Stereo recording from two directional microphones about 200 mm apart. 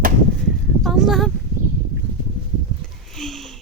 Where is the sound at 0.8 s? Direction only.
Centre (ahead or behind).